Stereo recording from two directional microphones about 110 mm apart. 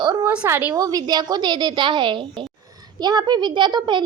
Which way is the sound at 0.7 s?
35° right (ahead or behind).